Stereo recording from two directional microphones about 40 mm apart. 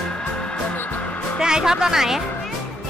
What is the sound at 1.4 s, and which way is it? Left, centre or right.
Speech, centre.